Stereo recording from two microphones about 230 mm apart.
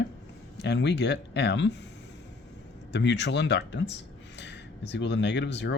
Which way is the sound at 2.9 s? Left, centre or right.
Left.